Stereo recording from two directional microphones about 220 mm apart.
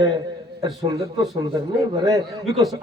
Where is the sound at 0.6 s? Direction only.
15° right (ahead or behind).